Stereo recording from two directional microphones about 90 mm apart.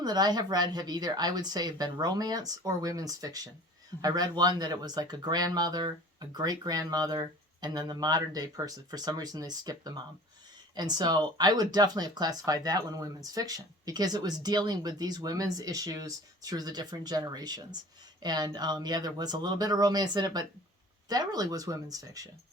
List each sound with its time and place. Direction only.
0.0 s speech: 50° right (ahead or behind)